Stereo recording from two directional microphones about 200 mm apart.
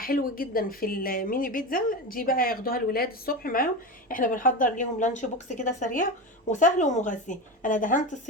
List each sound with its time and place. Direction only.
0.0 s a woman's voice: 45° left (ahead or behind)